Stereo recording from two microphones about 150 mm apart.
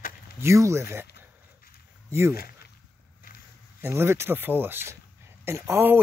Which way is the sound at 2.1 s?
20° right (ahead or behind).